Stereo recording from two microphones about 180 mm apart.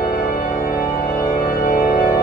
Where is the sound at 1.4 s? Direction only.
45° left (ahead or behind).